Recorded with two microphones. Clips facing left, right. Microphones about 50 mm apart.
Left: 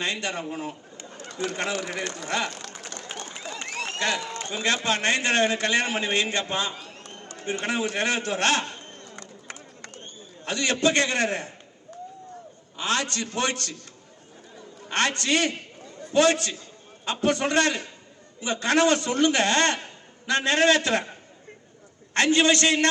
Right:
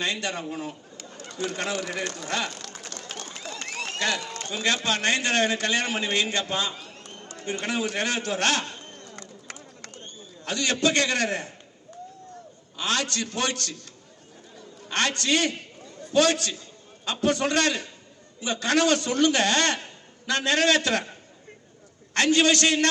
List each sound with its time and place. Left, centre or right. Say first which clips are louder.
0.0 s bird: even; left
1.5 s speech: even; left
2.6 s a sound: left 1 dB; left
12.7 s a man's voice: left 1 dB; left
14.8 s a man's voice: left 1 dB; left